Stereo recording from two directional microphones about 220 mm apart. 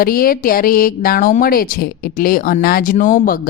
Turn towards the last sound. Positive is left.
turn(degrees=40)  # may be behind; listen again after turning